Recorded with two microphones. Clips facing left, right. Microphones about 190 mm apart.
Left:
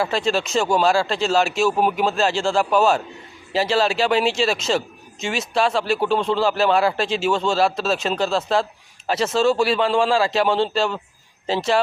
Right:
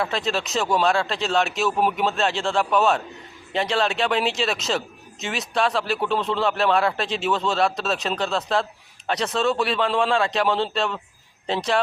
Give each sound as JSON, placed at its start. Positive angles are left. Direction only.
{"t": 0.0, "sound": "a man's voice", "side_deg": 0}